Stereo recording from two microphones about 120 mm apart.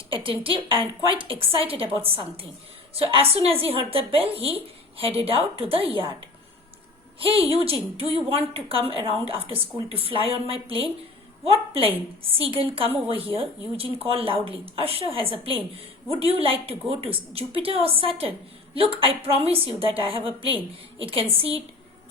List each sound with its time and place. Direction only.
0.1 s a woman's voice: 45° right (ahead or behind)
7.2 s a woman's voice: 50° right (ahead or behind)